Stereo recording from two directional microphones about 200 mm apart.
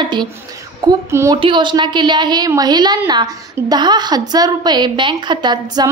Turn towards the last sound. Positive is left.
turn(degrees=-20)  # may be behind; listen again after turning